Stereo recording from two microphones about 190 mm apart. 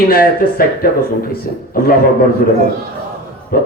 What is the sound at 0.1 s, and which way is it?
Speech, 50° left (ahead or behind).